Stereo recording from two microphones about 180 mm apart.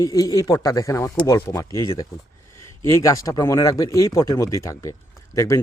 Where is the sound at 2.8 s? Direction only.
15° left (ahead or behind).